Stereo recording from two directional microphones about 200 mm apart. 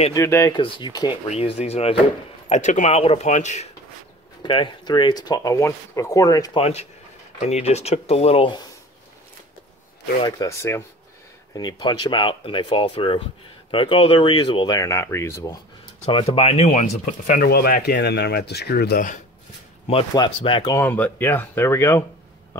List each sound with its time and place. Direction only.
0.1 s speech: 15° left (ahead or behind)
1.3 s speech: 30° left (ahead or behind)
4.4 s speech: 20° left (ahead or behind)
6.6 s speech: 30° left (ahead or behind)
10.2 s speech: 15° left (ahead or behind)
16.1 s speech: 30° left (ahead or behind)
19.9 s speech: 25° left (ahead or behind)
20.8 s speech: 10° left (ahead or behind)